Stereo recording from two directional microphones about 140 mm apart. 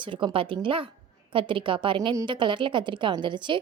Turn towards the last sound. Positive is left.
turn(degrees=-35)  # may be behind; listen again after turning